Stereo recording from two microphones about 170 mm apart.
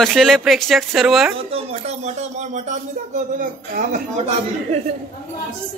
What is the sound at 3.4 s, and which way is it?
Speech, 50° right (ahead or behind).